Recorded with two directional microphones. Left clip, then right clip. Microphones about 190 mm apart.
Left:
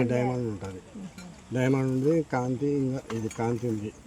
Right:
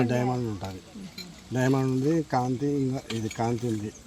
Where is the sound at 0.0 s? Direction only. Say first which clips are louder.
Even; 20° right (ahead or behind).